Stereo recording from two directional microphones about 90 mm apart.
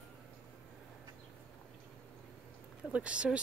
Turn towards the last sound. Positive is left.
turn(degrees=-15)  # may be behind; listen again after turning